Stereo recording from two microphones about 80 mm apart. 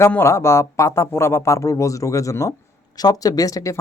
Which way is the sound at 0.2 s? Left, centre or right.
Left.